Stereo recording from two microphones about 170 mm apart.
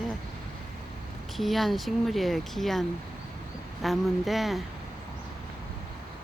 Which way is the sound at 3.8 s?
Centre (ahead or behind).